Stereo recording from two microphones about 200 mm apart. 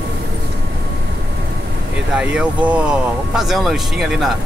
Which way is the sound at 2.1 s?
5° right (ahead or behind).